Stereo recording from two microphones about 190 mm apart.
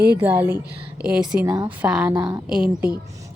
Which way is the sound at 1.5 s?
20° right (ahead or behind).